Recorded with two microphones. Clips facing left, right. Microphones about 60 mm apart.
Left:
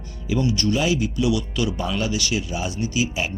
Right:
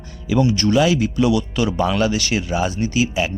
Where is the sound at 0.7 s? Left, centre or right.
Right.